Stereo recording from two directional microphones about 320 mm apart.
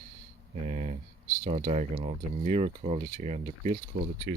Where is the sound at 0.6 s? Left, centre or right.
Right.